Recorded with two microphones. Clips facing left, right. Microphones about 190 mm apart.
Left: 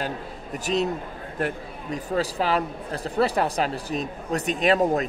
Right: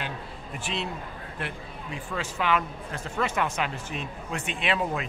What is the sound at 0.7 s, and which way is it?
A man's voice, 40° left (ahead or behind).